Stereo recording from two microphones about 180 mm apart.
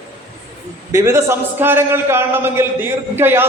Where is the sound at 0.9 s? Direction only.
15° right (ahead or behind).